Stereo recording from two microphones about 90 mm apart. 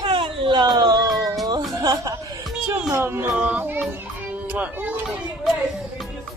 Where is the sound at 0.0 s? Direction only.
75° right (ahead or behind); by 1.3 s 45° right (ahead or behind).